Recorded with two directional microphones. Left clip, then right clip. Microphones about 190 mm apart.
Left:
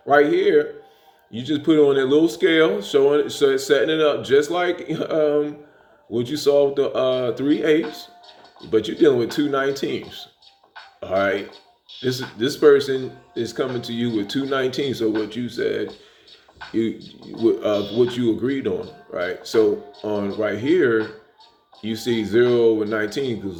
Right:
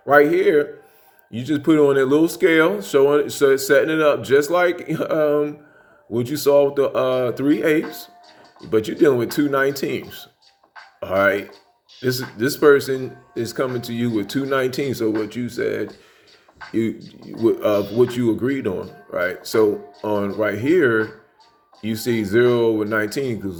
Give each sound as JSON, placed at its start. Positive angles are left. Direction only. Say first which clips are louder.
{"t": 0.0, "sound": "speech", "louder": "right 2 dB", "side_deg": -40}